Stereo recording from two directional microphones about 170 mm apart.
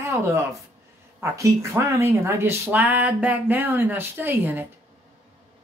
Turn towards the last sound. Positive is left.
turn(degrees=-10)  # may be behind; listen again after turning